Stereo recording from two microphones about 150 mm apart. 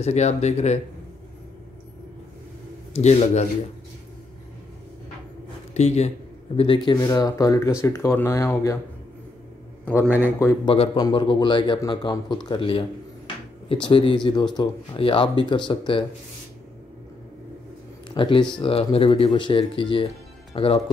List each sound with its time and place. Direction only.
0.0 s speech: 50° left (ahead or behind)
2.9 s speech: 45° left (ahead or behind)
5.8 s speech: 45° left (ahead or behind)
7.0 s speech: 20° left (ahead or behind)
10.6 s speech: 35° left (ahead or behind)
18.1 s speech: 35° left (ahead or behind)